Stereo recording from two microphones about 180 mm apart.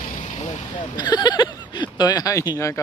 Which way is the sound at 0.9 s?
25° left (ahead or behind).